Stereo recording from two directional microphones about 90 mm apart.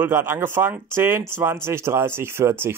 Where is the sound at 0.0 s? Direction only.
25° right (ahead or behind).